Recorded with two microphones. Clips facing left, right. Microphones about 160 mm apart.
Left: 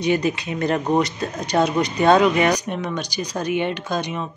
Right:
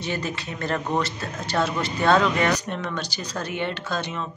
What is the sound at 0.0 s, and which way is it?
Speech, 15° left (ahead or behind).